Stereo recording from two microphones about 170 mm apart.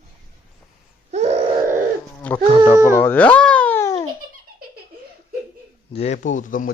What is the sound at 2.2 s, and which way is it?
Wild animals, 10° left (ahead or behind).